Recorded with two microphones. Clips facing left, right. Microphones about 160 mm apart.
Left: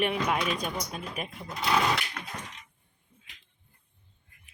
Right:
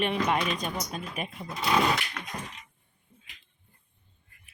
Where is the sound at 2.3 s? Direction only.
15° right (ahead or behind).